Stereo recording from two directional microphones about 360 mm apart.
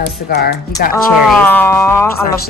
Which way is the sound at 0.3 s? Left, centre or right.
Left.